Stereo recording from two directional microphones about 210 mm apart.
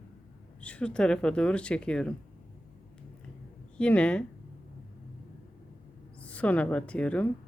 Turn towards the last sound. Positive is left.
turn(degrees=5)  # may be behind; listen again after turning